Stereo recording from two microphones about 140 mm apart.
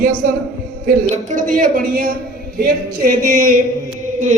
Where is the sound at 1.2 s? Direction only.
70° right (ahead or behind); by 2.2 s 90° right.